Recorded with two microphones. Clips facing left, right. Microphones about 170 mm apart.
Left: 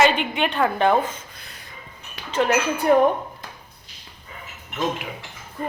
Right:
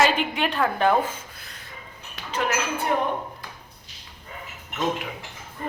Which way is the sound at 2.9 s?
45° left (ahead or behind).